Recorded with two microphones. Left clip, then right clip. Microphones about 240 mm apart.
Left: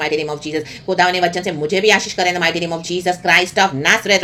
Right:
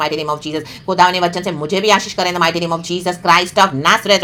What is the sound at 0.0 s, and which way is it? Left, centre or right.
Speech, centre.